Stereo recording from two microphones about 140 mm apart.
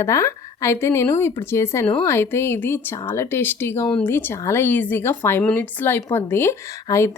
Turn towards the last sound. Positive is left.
turn(degrees=20)  # may be behind; listen again after turning